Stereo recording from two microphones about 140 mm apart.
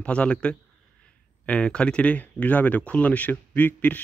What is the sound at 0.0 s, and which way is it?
Speech, 10° left (ahead or behind).